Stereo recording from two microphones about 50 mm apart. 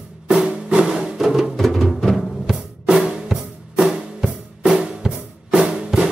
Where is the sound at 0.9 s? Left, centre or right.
Centre.